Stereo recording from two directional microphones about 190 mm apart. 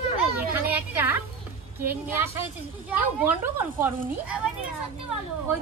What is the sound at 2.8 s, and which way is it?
Speech, 10° right (ahead or behind).